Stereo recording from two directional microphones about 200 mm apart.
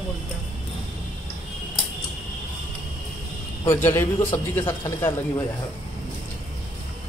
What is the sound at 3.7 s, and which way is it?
A man's voice, 10° left (ahead or behind).